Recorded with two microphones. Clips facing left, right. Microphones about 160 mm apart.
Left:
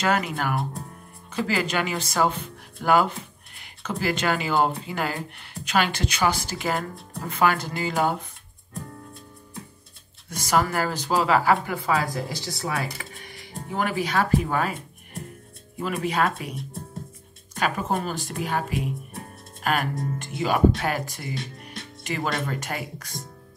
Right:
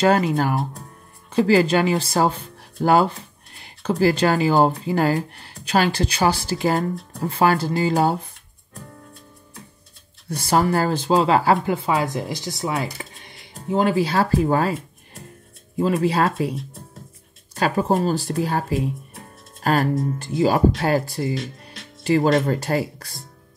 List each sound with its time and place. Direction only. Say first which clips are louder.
0.0 s speech: right 7 dB; 30° right (ahead or behind)
10.3 s speech: right 4 dB; 30° right (ahead or behind)
15.8 s speech: right 6 dB; 30° right (ahead or behind)
17.6 s speech: right 6 dB; 35° right (ahead or behind)